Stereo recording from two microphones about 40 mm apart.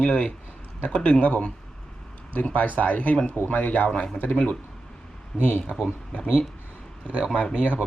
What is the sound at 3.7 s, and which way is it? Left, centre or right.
Speech, left.